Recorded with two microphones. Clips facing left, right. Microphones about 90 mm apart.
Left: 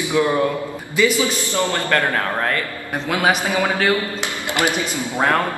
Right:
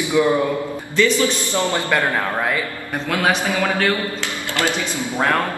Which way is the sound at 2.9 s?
10° left (ahead or behind).